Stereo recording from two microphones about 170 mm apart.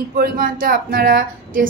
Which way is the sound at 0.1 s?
55° right (ahead or behind).